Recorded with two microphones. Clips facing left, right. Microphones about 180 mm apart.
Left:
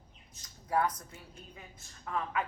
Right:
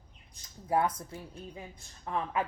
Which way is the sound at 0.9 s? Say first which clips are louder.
Right 7 dB; 30° right (ahead or behind).